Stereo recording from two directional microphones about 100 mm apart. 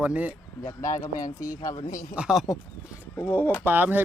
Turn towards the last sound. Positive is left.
turn(degrees=-20)  # may be behind; listen again after turning